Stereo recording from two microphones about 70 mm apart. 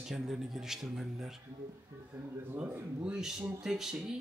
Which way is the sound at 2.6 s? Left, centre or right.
Centre.